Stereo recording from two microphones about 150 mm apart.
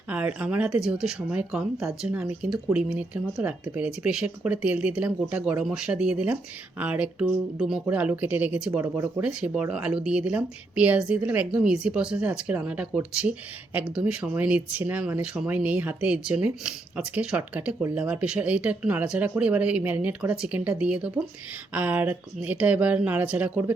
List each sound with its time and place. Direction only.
0.1 s speech: 10° right (ahead or behind)